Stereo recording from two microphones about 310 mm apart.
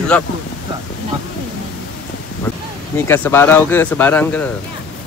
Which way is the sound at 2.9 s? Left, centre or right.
Centre.